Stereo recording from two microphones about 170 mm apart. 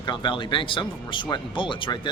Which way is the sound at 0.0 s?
25° left (ahead or behind).